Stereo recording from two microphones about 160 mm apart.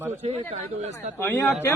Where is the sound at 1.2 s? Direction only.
15° left (ahead or behind).